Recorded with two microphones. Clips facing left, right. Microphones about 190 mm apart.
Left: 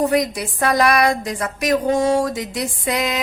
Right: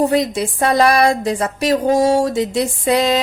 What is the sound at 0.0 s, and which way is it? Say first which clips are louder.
A woman's voice: right 3 dB; 25° right (ahead or behind).